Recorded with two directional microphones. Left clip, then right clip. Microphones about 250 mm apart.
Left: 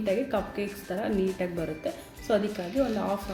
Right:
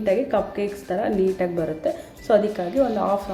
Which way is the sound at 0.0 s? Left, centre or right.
Centre.